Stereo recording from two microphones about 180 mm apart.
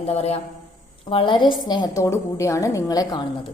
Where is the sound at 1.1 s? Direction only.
30° left (ahead or behind).